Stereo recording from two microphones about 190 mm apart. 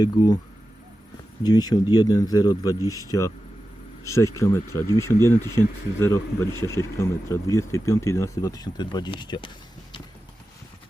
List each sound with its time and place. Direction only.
0.0 s speech: 20° left (ahead or behind)
1.5 s speech: 20° left (ahead or behind)